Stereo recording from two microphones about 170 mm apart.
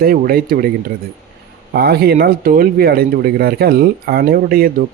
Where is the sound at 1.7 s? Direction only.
70° right (ahead or behind).